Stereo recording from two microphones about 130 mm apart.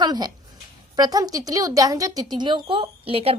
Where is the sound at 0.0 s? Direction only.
30° right (ahead or behind).